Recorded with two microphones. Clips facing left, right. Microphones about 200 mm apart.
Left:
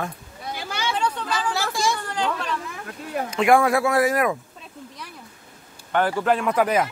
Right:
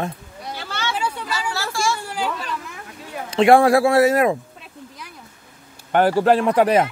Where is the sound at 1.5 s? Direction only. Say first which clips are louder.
Right 1 dB; 20° left (ahead or behind).